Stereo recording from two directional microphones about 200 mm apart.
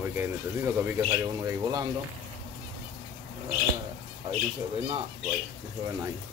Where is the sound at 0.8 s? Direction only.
15° right (ahead or behind).